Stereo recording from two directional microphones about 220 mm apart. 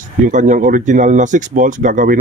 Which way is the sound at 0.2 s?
35° right (ahead or behind).